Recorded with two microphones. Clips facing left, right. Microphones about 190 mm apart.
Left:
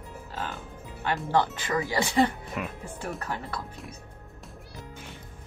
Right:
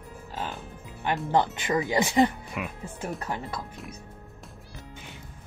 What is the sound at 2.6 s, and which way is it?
Speech, 5° right (ahead or behind).